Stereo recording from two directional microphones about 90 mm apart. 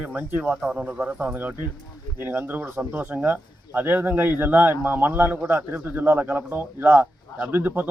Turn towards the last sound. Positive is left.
turn(degrees=-20)  # may be behind; listen again after turning